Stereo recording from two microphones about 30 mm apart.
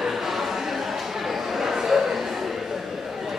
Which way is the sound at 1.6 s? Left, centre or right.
Centre.